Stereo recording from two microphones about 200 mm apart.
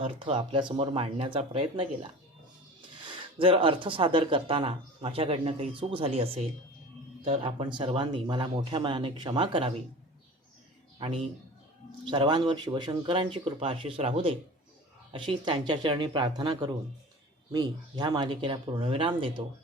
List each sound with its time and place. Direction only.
0.0 s speech: 25° right (ahead or behind)
3.3 s speech: 25° right (ahead or behind)
10.9 s a man's voice: 30° right (ahead or behind)